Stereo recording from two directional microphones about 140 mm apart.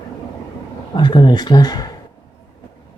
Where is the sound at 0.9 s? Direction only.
35° left (ahead or behind).